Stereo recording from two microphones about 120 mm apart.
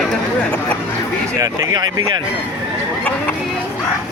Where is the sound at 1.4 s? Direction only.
30° right (ahead or behind).